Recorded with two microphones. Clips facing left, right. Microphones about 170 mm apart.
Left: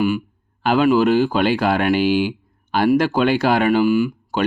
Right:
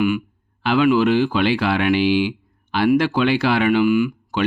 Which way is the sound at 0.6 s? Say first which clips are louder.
Left 1 dB; 45° left (ahead or behind).